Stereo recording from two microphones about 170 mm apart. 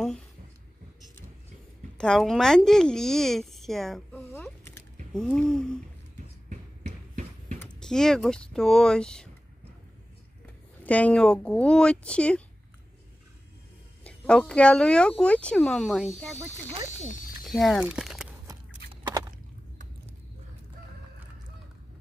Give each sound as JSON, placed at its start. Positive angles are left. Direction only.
{"t": 2.0, "sound": "speech", "side_deg": 5}
{"t": 4.3, "sound": "a sound", "side_deg": 15}
{"t": 5.1, "sound": "speech", "side_deg": 5}
{"t": 6.5, "sound": "a sound", "side_deg": -45}
{"t": 7.5, "sound": "speech", "side_deg": 5}
{"t": 10.8, "sound": "speech", "side_deg": 10}
{"t": 14.0, "sound": "speech", "side_deg": 5}
{"t": 16.8, "sound": "speech", "side_deg": 45}
{"t": 17.5, "sound": "speech", "side_deg": 0}